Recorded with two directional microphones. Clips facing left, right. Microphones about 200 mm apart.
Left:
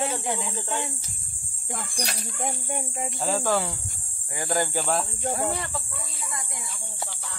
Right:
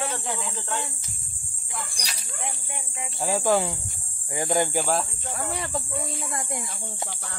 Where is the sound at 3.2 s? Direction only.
15° right (ahead or behind).